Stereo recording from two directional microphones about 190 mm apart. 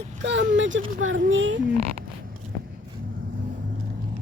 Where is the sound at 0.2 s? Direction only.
70° right (ahead or behind).